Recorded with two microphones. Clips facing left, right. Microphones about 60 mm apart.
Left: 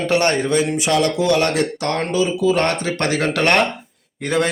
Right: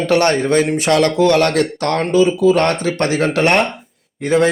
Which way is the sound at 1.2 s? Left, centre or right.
Right.